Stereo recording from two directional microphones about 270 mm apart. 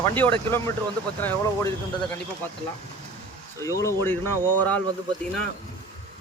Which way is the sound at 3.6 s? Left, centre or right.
Centre.